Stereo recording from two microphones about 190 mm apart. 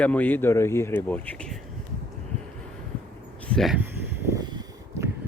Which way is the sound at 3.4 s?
Centre (ahead or behind).